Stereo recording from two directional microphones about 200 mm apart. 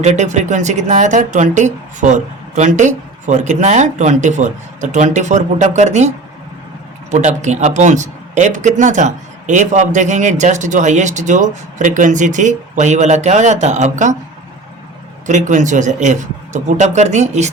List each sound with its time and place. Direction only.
0.0 s speech: 35° right (ahead or behind)
15.3 s speech: 35° right (ahead or behind)